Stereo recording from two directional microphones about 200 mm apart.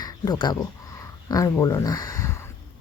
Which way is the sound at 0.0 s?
20° left (ahead or behind).